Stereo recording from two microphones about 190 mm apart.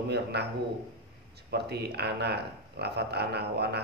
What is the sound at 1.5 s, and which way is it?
A man's voice, 60° right (ahead or behind).